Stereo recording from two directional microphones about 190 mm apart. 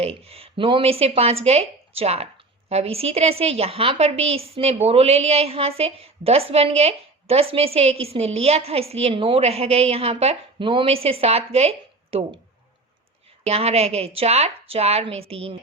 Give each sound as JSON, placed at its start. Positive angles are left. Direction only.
{"t": 0.0, "sound": "a woman's voice", "side_deg": -30}
{"t": 13.4, "sound": "a woman's voice", "side_deg": -30}